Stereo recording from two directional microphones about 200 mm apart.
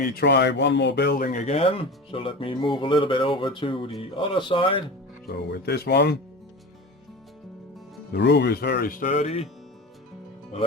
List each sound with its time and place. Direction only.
0.0 s speech: 50° left (ahead or behind); by 4.8 s 25° left (ahead or behind)
5.5 s speech: 55° left (ahead or behind)
8.1 s speech: 60° left (ahead or behind); by 9.5 s 30° left (ahead or behind)